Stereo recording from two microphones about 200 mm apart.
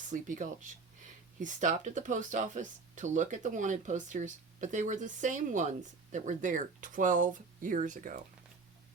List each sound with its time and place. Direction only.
0.1 s speech: 40° right (ahead or behind)